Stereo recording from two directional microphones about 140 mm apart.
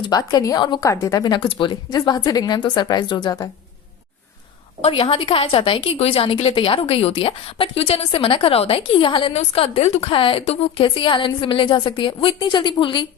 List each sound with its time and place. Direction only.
0.0 s a woman's voice: 30° left (ahead or behind)
4.8 s a woman's voice: 45° left (ahead or behind)